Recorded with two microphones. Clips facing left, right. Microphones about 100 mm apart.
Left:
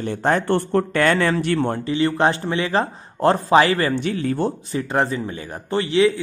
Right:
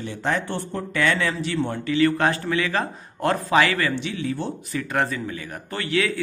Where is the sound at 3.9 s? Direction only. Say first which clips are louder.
Left 5 dB; 45° left (ahead or behind).